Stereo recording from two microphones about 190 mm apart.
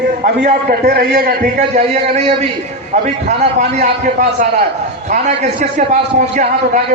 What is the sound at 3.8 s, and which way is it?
A man's voice, 45° right (ahead or behind).